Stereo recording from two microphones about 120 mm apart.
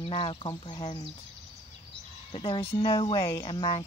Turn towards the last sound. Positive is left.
turn(degrees=45)  # may be behind; listen again after turning